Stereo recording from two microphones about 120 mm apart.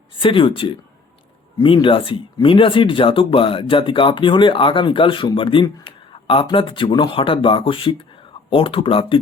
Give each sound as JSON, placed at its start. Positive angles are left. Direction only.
{"t": 0.2, "sound": "speech", "side_deg": 45}